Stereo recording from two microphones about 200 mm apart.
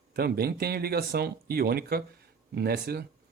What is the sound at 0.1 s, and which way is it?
Speech, 50° right (ahead or behind).